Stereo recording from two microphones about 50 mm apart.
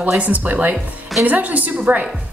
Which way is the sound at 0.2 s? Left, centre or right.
Right.